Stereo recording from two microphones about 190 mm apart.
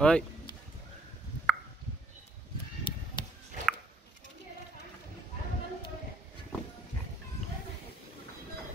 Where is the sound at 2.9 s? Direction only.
25° left (ahead or behind).